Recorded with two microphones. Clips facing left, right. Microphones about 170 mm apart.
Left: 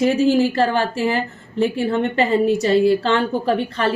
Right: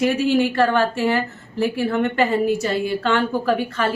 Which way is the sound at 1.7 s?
30° left (ahead or behind).